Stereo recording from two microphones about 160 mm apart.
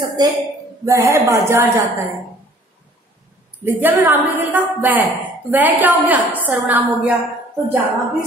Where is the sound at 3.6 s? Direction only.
10° right (ahead or behind).